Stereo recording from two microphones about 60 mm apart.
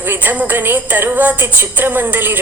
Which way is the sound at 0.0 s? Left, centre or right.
Right.